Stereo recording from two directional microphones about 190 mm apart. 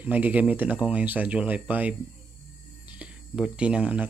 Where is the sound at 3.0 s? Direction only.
5° right (ahead or behind).